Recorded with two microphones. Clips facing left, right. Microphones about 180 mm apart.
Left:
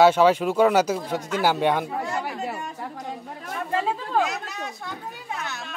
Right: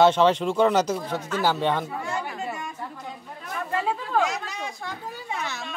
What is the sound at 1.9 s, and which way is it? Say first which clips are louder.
Speech: left 2 dB; 35° left (ahead or behind).